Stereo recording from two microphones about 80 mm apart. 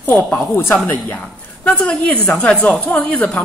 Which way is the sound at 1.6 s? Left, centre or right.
Centre.